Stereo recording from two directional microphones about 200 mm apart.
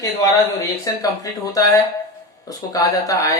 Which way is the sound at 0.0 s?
20° left (ahead or behind).